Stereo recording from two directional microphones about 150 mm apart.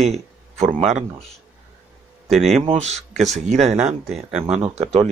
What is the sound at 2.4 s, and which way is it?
Speech, 45° right (ahead or behind).